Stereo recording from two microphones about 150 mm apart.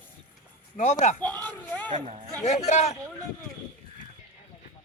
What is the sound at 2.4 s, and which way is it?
Speech, 50° left (ahead or behind).